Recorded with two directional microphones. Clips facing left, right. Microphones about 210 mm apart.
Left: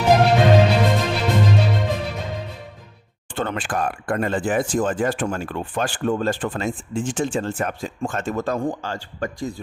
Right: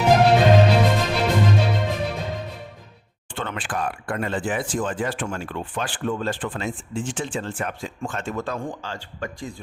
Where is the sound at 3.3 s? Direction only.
40° left (ahead or behind).